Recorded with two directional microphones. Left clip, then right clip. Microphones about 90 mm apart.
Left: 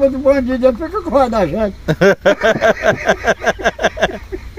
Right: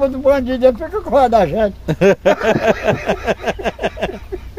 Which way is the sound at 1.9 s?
15° right (ahead or behind).